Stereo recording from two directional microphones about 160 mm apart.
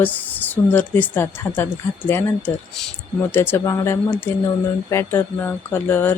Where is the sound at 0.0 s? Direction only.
10° left (ahead or behind).